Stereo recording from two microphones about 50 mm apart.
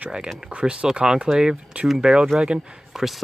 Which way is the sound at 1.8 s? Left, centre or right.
Centre.